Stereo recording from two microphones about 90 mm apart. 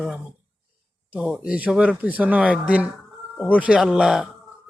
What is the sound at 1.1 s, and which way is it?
A man's voice, 10° right (ahead or behind).